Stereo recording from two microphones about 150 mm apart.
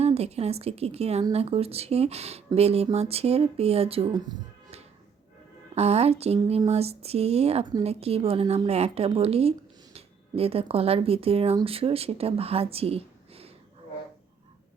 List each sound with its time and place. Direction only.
0.0 s a woman's voice: 45° right (ahead or behind)
5.7 s a woman's voice: 45° right (ahead or behind)